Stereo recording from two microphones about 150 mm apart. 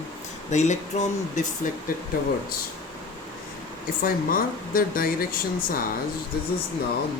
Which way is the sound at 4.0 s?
70° left (ahead or behind).